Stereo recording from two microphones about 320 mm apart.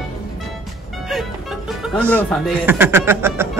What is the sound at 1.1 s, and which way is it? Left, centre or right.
Music, centre.